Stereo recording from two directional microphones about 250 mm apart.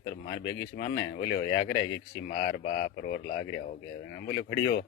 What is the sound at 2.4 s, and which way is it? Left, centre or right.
A man's voice, left.